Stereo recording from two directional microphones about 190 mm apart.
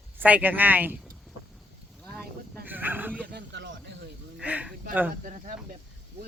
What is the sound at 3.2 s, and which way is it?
Speech, 65° right (ahead or behind).